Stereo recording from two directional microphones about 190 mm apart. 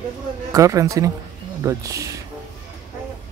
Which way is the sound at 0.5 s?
15° right (ahead or behind).